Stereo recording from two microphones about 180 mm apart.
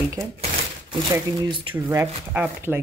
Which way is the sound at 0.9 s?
25° right (ahead or behind).